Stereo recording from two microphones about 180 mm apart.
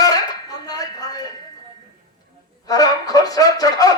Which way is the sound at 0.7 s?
20° left (ahead or behind).